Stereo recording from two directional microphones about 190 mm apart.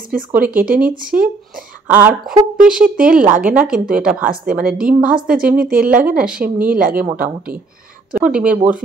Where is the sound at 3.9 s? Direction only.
5° right (ahead or behind).